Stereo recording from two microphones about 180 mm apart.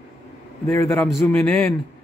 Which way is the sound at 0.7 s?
15° left (ahead or behind).